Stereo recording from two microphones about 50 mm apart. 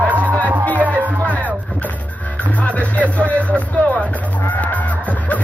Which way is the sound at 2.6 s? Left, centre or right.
Left.